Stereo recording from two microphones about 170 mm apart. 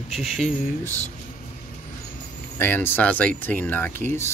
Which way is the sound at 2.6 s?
10° left (ahead or behind).